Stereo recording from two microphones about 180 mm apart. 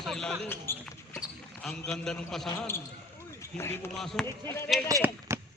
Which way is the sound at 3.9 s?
Centre (ahead or behind).